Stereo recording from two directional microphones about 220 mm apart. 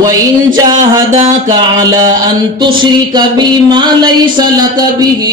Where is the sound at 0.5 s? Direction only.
20° right (ahead or behind).